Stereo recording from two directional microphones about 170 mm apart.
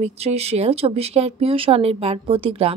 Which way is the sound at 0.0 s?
40° right (ahead or behind).